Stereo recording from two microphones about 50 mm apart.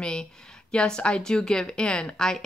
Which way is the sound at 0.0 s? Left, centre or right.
Centre.